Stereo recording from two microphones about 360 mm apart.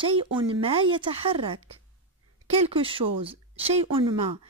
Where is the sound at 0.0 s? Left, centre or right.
Centre.